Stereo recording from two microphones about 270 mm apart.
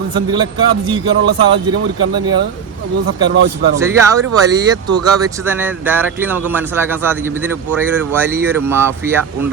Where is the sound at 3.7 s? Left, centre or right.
Centre.